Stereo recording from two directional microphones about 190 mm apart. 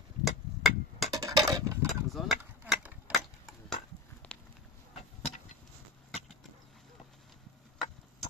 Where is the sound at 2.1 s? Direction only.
Centre (ahead or behind).